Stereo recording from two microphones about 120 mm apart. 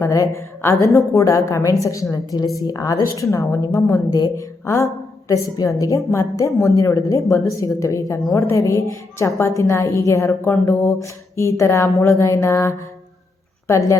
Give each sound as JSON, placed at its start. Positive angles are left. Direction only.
{"t": 0.0, "sound": "a woman's voice", "side_deg": 25}